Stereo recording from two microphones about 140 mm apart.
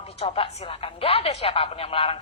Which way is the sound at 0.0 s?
45° left (ahead or behind).